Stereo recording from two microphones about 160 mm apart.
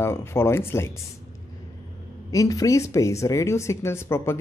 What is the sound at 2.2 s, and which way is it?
Speech, 20° left (ahead or behind).